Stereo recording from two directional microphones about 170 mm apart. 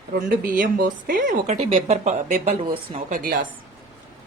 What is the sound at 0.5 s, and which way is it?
Speech, 50° right (ahead or behind).